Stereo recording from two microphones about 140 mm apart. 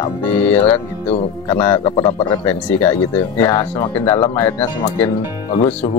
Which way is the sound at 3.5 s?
30° left (ahead or behind).